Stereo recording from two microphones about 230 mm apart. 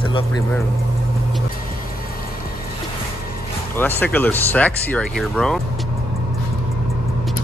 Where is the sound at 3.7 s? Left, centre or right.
Centre.